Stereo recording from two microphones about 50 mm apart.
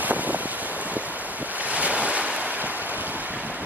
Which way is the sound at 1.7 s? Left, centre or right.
Right.